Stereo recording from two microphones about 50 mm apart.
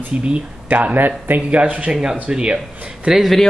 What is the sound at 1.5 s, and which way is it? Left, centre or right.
Speech, right.